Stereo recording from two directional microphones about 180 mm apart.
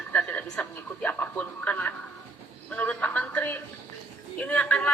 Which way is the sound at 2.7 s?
10° left (ahead or behind).